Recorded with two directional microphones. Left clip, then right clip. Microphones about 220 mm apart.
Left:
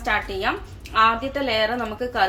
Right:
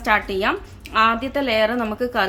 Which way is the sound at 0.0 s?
40° right (ahead or behind).